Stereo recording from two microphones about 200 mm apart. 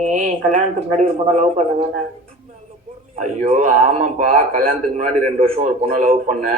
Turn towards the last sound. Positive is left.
turn(degrees=-35)  # may be behind; listen again after turning